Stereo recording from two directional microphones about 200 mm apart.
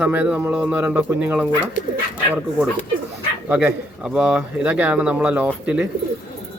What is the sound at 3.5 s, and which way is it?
Speech, 5° right (ahead or behind).